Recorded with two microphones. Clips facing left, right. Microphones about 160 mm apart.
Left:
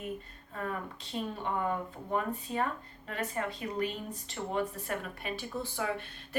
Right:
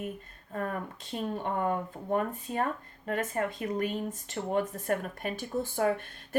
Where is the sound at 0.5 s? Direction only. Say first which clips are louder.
Right 3 dB; 45° right (ahead or behind).